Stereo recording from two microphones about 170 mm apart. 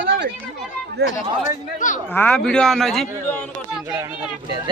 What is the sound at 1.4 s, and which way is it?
Speech, 45° left (ahead or behind).